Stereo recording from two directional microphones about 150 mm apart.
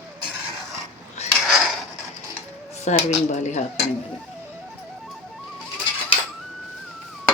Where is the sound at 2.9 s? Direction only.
50° left (ahead or behind).